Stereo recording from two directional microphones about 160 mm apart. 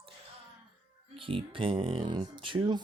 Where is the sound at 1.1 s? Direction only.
35° right (ahead or behind).